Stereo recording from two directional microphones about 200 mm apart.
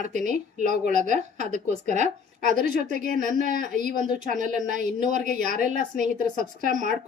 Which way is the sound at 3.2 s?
40° right (ahead or behind).